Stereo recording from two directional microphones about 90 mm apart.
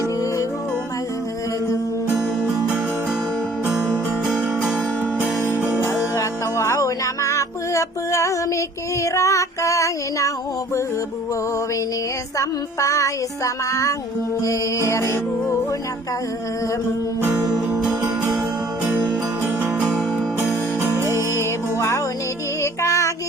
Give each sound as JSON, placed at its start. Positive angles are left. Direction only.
{"t": 5.5, "sound": "music", "side_deg": -20}
{"t": 5.8, "sound": "music", "side_deg": 30}
{"t": 12.4, "sound": "music", "side_deg": 35}
{"t": 17.3, "sound": "music", "side_deg": -45}
{"t": 20.8, "sound": "music", "side_deg": -30}
{"t": 21.8, "sound": "music", "side_deg": 30}